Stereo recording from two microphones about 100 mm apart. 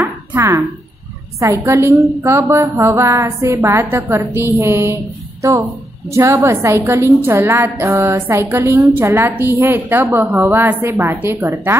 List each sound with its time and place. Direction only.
0.4 s a woman's voice: 30° right (ahead or behind)
6.0 s a woman's voice: 30° right (ahead or behind)